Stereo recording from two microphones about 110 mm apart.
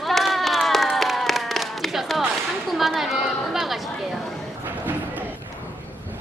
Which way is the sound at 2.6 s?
Centre (ahead or behind).